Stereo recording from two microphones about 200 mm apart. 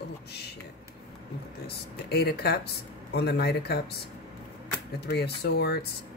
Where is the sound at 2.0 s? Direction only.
50° left (ahead or behind).